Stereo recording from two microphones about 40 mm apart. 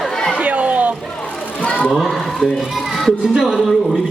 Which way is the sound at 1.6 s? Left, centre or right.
Left.